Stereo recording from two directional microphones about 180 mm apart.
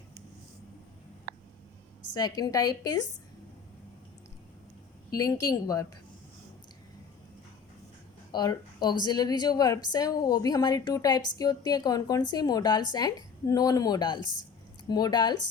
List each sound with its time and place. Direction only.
2.1 s a woman's voice: 20° left (ahead or behind)
5.1 s a woman's voice: 20° left (ahead or behind)
8.3 s a woman's voice: 25° left (ahead or behind)